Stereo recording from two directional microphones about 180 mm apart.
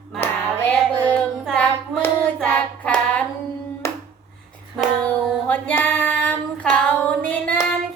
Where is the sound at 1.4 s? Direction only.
5° left (ahead or behind).